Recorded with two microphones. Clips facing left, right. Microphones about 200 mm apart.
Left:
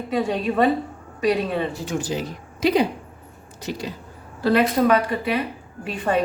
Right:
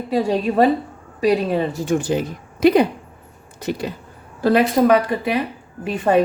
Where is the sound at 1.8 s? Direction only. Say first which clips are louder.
Right 6 dB; 55° right (ahead or behind).